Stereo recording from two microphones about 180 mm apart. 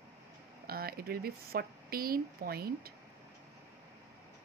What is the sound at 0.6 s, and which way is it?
Speech, 55° right (ahead or behind).